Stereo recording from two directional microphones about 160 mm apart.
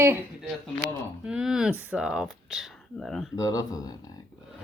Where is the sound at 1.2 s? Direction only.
5° right (ahead or behind).